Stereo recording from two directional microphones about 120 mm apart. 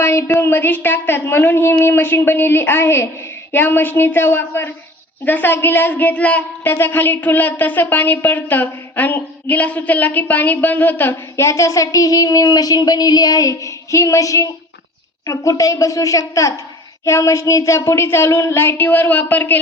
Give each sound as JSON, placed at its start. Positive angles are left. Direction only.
{"t": 0.0, "sound": "a woman's voice", "side_deg": 25}